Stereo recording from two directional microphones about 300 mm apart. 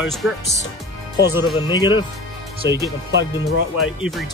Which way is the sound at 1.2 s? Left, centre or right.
Centre.